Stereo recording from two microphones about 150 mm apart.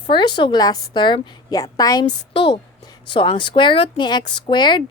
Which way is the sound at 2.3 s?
35° left (ahead or behind).